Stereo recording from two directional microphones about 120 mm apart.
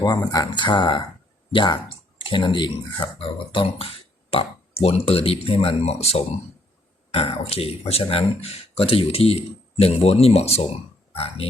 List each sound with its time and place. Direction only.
0.0 s speech: 35° left (ahead or behind); by 10.7 s 60° left (ahead or behind)